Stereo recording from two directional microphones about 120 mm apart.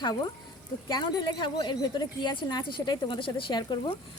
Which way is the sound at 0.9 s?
35° left (ahead or behind).